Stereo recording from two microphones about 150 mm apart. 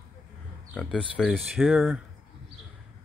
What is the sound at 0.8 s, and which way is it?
Speech, 10° left (ahead or behind).